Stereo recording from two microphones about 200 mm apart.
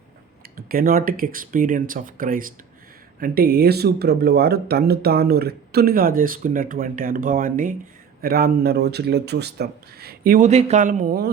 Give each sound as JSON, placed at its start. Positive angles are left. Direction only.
{"t": 0.5, "sound": "speech", "side_deg": -45}